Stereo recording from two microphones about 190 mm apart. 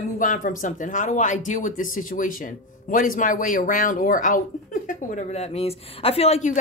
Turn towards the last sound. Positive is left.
turn(degrees=35)  # may be behind; listen again after turning